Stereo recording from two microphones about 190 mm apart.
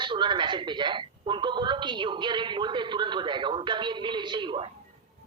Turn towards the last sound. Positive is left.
turn(degrees=-25)  # may be behind; listen again after turning